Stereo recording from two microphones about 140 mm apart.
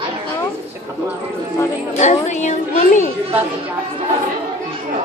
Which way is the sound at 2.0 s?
55° left (ahead or behind).